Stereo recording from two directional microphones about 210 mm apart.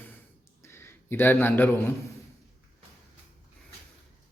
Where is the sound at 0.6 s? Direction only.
10° left (ahead or behind).